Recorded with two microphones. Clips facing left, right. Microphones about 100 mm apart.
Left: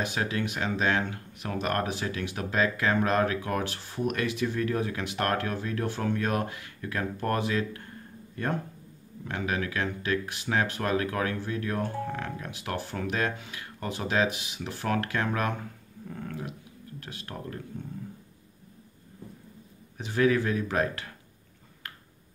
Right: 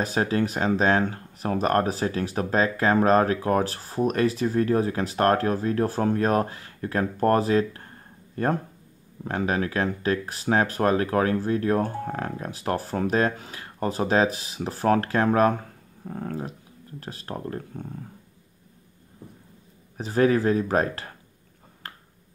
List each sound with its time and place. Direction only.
0.0 s speech: 35° right (ahead or behind)
20.0 s speech: 35° right (ahead or behind)